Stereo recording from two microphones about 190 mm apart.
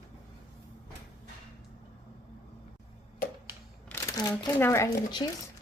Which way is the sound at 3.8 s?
15° left (ahead or behind).